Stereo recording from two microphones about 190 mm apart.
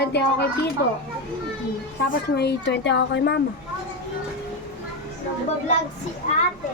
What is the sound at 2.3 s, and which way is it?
Speech, 60° left (ahead or behind).